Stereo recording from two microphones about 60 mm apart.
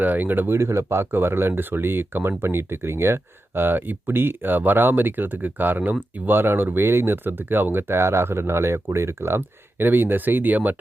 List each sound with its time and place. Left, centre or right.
0.0 s speech: right